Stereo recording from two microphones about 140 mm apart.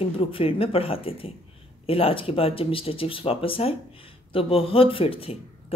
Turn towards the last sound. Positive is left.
turn(degrees=40)  # may be behind; listen again after turning